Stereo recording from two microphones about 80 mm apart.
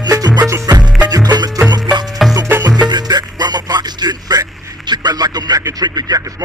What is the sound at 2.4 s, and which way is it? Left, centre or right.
Music, right.